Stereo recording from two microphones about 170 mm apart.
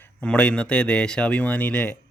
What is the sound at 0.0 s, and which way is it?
Speech, 5° left (ahead or behind).